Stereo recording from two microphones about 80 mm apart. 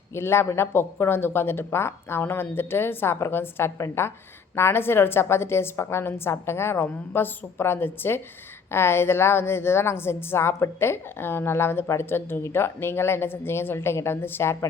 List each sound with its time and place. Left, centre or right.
0.1 s a woman's voice: left